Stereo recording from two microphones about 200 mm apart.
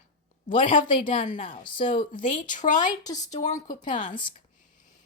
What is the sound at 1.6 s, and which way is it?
Speech, 25° left (ahead or behind).